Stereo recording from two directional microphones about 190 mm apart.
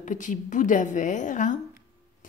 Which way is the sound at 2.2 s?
45° left (ahead or behind).